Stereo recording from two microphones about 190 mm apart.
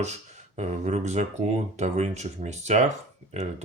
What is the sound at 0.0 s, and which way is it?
Speech, 35° right (ahead or behind).